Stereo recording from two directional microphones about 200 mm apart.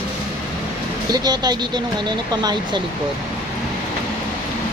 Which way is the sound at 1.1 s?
20° right (ahead or behind).